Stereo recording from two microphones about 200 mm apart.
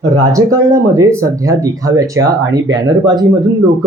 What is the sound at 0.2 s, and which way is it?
Speech, 15° right (ahead or behind).